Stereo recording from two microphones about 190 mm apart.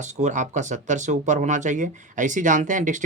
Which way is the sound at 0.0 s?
40° right (ahead or behind).